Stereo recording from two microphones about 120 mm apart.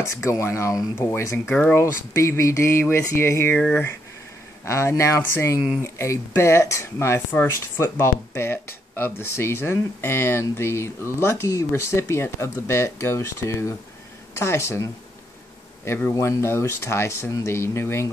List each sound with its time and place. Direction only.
0.0 s speech: 25° left (ahead or behind)
1.5 s speech: 10° left (ahead or behind)
1.8 s speech: 25° left (ahead or behind)